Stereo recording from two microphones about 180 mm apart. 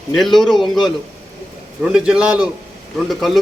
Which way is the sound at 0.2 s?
Centre (ahead or behind).